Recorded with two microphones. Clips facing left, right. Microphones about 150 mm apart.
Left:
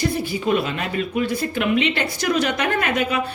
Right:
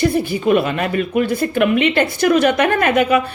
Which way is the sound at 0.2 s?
55° right (ahead or behind).